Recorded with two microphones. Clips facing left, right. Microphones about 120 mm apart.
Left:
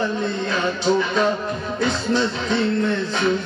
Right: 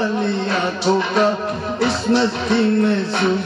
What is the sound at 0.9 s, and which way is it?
Music, 70° right (ahead or behind).